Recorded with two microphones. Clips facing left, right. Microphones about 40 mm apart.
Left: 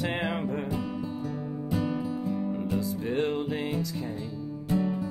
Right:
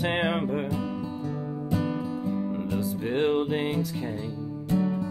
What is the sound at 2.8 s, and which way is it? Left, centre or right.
Music, right.